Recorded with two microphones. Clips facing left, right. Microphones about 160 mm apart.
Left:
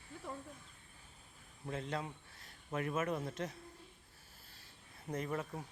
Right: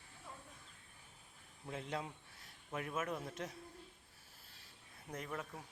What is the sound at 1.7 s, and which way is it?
Speech, 10° right (ahead or behind).